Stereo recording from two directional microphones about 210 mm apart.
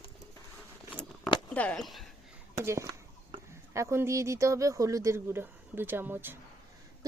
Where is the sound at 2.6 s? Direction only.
15° right (ahead or behind).